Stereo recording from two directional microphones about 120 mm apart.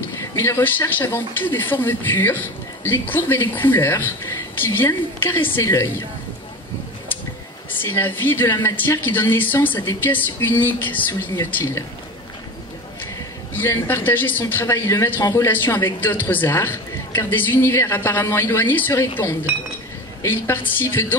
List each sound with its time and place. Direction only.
0.2 s speech: 20° left (ahead or behind)
7.8 s speech: 15° left (ahead or behind)
13.5 s speech: 20° left (ahead or behind)